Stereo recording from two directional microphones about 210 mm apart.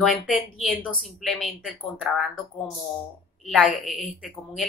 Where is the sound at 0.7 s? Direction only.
Centre (ahead or behind).